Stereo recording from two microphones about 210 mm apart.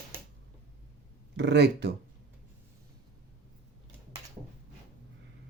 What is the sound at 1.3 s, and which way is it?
Speech, 55° right (ahead or behind).